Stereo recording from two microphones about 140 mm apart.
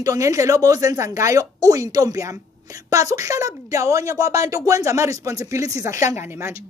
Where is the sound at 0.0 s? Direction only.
25° right (ahead or behind).